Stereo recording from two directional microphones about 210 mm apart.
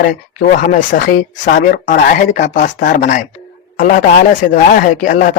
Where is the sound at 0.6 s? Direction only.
40° left (ahead or behind).